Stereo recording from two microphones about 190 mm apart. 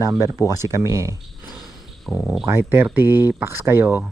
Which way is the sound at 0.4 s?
15° right (ahead or behind).